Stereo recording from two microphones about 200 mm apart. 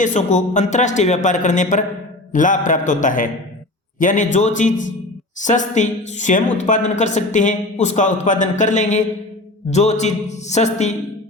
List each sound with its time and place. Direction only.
0.0 s speech: 35° left (ahead or behind)